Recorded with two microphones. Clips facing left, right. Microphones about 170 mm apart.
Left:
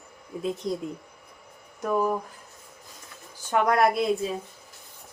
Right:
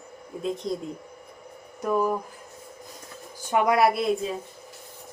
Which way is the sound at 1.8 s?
Centre (ahead or behind).